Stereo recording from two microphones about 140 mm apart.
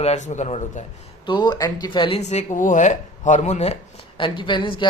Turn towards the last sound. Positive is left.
turn(degrees=35)  # may be behind; listen again after turning